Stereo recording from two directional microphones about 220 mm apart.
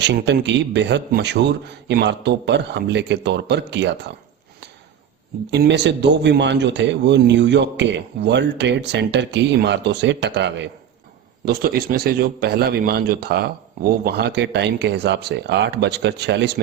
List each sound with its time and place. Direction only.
0.0 s a man's voice: 50° right (ahead or behind)
5.5 s a man's voice: 50° right (ahead or behind)